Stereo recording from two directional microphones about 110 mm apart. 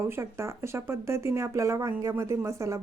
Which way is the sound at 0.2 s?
25° right (ahead or behind).